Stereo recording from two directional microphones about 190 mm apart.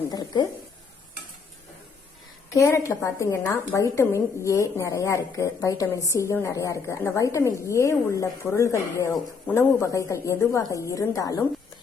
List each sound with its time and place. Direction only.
0.1 s a woman's voice: 20° left (ahead or behind)
2.5 s a woman's voice: 15° left (ahead or behind)